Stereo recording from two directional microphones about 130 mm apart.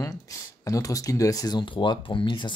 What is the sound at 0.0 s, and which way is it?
Speech, 25° left (ahead or behind).